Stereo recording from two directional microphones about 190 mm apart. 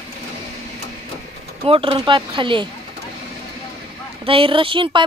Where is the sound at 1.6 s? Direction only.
30° right (ahead or behind).